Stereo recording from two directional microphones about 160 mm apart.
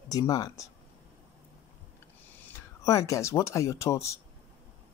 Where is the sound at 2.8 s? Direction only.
20° left (ahead or behind).